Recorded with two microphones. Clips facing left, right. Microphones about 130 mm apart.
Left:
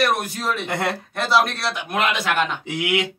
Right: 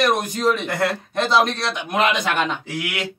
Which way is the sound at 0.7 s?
25° left (ahead or behind).